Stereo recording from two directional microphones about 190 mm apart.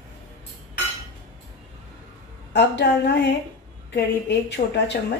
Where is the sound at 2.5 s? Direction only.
65° left (ahead or behind).